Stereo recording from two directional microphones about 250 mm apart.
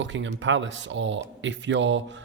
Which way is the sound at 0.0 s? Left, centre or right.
Right.